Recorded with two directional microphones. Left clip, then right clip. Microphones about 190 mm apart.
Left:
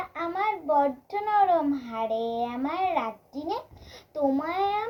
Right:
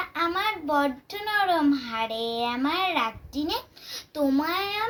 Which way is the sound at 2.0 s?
20° right (ahead or behind).